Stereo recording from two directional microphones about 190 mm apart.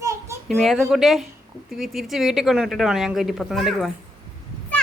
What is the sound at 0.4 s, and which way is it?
Speech, centre (ahead or behind).